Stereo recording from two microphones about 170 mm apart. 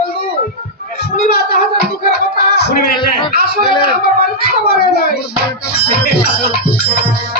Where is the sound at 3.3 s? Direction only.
65° left (ahead or behind).